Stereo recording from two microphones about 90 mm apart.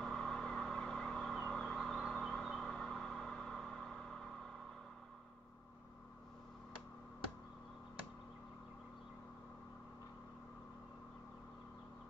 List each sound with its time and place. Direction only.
0.0 s vehicle: 5° left (ahead or behind)